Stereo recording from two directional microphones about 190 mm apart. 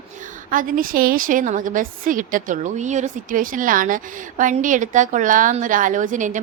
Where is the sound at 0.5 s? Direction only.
45° right (ahead or behind).